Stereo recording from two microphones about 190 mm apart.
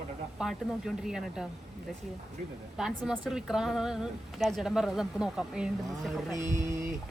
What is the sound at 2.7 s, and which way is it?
A woman's voice, 5° right (ahead or behind).